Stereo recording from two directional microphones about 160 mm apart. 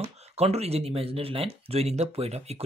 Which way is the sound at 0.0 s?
40° right (ahead or behind).